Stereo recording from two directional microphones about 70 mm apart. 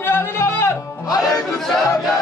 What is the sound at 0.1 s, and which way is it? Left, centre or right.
Music, left.